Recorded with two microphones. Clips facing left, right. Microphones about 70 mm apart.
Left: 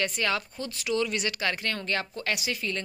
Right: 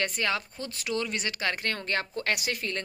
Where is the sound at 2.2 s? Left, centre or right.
Right.